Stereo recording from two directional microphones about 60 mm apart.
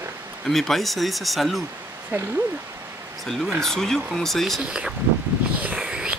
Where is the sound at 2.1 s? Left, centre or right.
Right.